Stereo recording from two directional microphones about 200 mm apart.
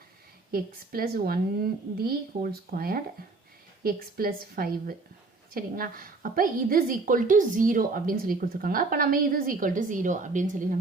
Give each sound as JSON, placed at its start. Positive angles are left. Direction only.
{"t": 0.5, "sound": "a woman's voice", "side_deg": -50}